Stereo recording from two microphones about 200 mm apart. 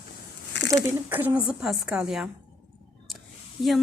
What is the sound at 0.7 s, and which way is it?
A woman's voice, 10° right (ahead or behind).